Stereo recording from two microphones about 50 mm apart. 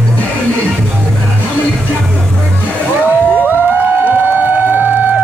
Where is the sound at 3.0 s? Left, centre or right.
Right.